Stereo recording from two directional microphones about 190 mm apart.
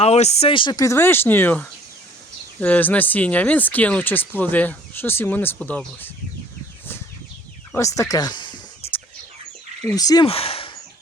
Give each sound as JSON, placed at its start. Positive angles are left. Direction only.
{"t": 0.0, "sound": "speech", "side_deg": 35}
{"t": 7.8, "sound": "speech", "side_deg": 15}
{"t": 9.9, "sound": "speech", "side_deg": 20}
{"t": 10.2, "sound": "speech", "side_deg": 30}